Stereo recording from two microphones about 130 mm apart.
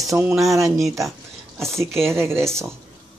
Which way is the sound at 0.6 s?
25° right (ahead or behind).